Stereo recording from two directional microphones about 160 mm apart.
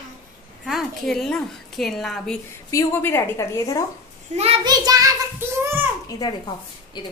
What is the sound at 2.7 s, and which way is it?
A woman's voice, 15° left (ahead or behind).